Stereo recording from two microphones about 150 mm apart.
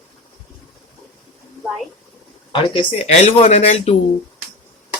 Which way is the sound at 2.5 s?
35° left (ahead or behind).